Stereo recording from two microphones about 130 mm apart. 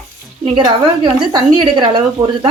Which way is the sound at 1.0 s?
35° right (ahead or behind).